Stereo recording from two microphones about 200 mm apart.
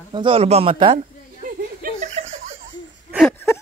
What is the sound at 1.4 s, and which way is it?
Chuckle, 40° right (ahead or behind).